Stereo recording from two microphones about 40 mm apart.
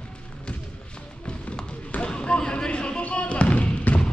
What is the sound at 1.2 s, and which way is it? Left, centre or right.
Music, left.